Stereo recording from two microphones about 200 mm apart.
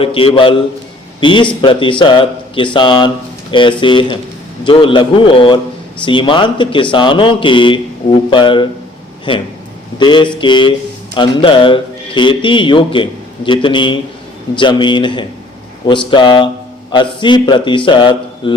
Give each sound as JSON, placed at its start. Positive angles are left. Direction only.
{"t": 0.0, "sound": "speech", "side_deg": 25}